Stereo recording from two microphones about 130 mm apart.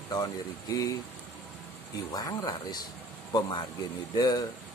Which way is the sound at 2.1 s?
30° left (ahead or behind).